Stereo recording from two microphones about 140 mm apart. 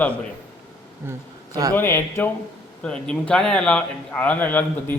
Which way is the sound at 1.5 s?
25° right (ahead or behind).